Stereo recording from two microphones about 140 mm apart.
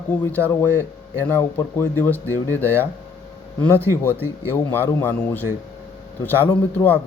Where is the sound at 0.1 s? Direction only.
10° left (ahead or behind).